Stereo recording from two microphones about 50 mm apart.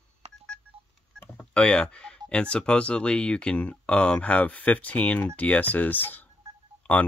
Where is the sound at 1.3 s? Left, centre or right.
Centre.